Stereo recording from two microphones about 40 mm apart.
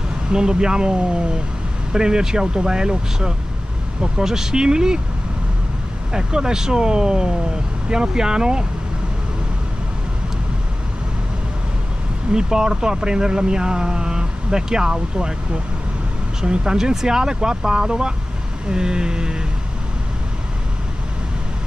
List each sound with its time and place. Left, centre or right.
0.3 s speech: centre
6.1 s speech: centre
12.3 s speech: centre
16.3 s speech: centre